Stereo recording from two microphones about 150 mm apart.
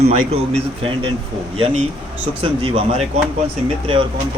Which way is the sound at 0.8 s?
35° right (ahead or behind).